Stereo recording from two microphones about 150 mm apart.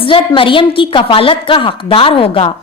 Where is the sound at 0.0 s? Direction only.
35° left (ahead or behind).